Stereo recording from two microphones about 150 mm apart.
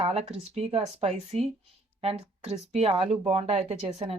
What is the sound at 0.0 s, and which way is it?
Speech, 45° right (ahead or behind).